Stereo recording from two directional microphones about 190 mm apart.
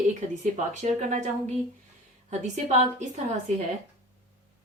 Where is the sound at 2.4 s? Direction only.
40° right (ahead or behind).